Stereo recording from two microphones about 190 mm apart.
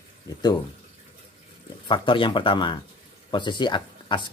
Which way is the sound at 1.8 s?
25° left (ahead or behind).